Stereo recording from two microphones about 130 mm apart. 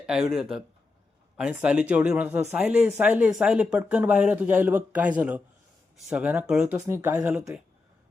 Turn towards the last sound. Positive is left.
turn(degrees=-5)  # may be behind; listen again after turning